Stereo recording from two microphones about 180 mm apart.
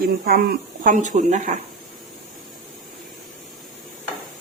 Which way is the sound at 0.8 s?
45° right (ahead or behind).